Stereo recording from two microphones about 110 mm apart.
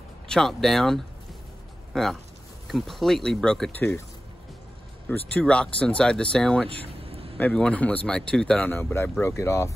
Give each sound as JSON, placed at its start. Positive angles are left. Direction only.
{"t": 0.3, "sound": "speech", "side_deg": 5}
{"t": 3.7, "sound": "speech", "side_deg": 15}
{"t": 5.4, "sound": "speech", "side_deg": 10}
{"t": 6.7, "sound": "vehicle", "side_deg": -60}
{"t": 7.5, "sound": "speech", "side_deg": 10}
{"t": 8.7, "sound": "speech", "side_deg": 20}